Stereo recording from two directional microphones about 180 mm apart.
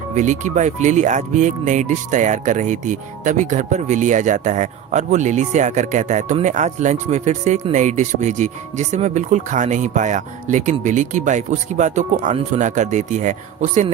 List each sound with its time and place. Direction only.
0.1 s speech: 40° right (ahead or behind)